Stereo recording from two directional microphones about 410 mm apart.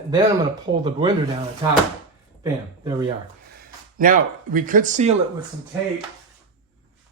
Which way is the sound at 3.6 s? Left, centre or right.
Centre.